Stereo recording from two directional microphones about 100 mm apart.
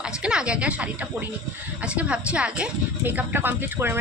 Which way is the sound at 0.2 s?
10° right (ahead or behind).